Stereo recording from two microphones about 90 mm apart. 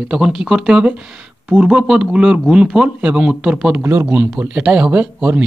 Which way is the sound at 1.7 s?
5° right (ahead or behind).